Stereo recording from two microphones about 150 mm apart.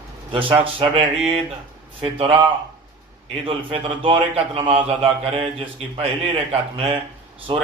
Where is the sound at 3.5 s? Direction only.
35° right (ahead or behind).